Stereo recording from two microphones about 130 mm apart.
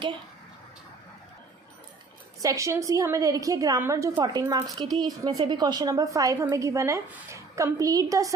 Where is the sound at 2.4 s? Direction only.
25° right (ahead or behind).